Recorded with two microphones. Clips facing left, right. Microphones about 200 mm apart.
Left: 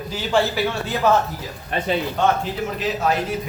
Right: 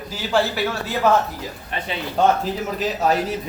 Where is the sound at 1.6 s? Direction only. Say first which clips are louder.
Left 7 dB; 45° left (ahead or behind).